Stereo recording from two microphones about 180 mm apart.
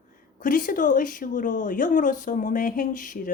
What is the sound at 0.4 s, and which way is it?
Speech, 50° left (ahead or behind).